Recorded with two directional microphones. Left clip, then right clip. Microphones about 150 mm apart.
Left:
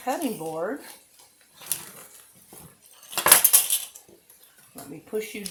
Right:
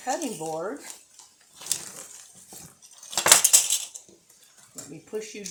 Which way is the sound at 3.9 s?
40° right (ahead or behind).